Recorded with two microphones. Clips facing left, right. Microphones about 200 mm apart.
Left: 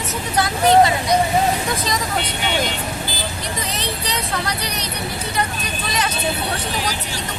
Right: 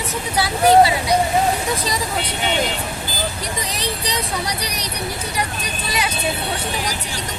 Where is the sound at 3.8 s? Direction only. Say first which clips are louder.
Right 1 dB; 15° right (ahead or behind).